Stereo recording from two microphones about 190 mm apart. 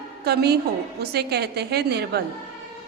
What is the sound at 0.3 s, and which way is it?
A woman's voice, 55° right (ahead or behind).